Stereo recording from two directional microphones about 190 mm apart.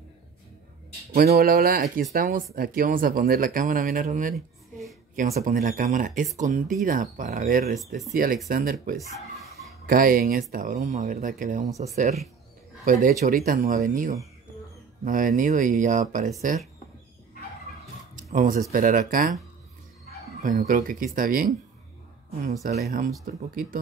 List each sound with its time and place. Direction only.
1.1 s speech: 55° right (ahead or behind)
9.8 s speech: 50° right (ahead or behind)
18.1 s speech: 45° right (ahead or behind)
20.4 s speech: 45° right (ahead or behind)
22.4 s speech: 35° right (ahead or behind)
22.8 s speech: 55° right (ahead or behind)